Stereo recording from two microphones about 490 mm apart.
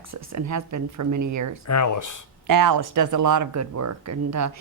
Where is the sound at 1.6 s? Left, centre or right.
Left.